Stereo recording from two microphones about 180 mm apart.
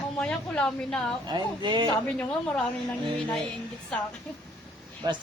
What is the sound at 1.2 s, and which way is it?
Speech, 25° right (ahead or behind).